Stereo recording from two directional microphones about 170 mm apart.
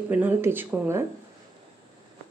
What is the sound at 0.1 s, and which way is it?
Speech, 10° right (ahead or behind).